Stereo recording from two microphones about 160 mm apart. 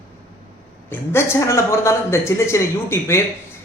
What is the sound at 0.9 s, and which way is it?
Speech, 15° left (ahead or behind).